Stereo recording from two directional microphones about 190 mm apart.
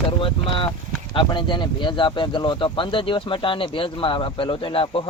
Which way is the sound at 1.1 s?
25° left (ahead or behind).